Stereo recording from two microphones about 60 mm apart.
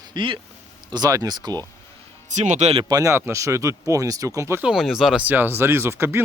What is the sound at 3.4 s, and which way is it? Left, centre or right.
Speech, right.